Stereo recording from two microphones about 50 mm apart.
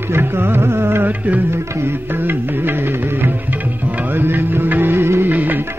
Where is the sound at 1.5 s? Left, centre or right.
Right.